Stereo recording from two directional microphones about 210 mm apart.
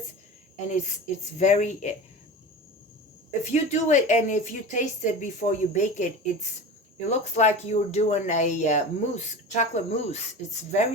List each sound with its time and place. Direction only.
0.7 s speech: 35° left (ahead or behind)
3.4 s speech: 35° left (ahead or behind)
7.3 s speech: 30° left (ahead or behind)